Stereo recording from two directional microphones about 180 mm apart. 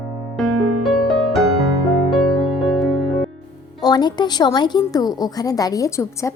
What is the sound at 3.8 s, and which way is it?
Speech, 25° left (ahead or behind).